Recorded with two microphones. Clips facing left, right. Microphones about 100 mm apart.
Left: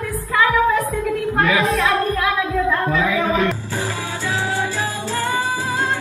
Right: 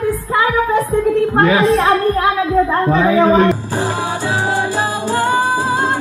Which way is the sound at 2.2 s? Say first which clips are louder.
Right 5 dB; 30° right (ahead or behind).